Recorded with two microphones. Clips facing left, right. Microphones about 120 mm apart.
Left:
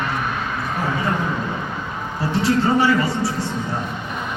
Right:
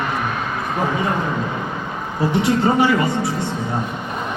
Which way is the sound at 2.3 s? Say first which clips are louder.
Even; 20° right (ahead or behind).